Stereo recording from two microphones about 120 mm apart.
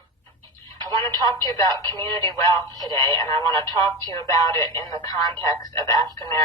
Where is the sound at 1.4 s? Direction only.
30° left (ahead or behind).